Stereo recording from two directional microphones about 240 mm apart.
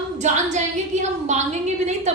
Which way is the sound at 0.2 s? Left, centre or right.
Right.